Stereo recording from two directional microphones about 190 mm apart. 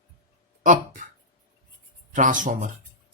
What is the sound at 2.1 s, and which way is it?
Speech, 45° right (ahead or behind).